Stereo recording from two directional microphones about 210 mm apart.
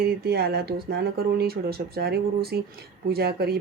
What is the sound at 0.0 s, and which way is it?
Speech, 50° right (ahead or behind).